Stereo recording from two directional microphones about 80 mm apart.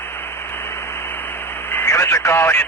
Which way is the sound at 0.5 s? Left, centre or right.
Left.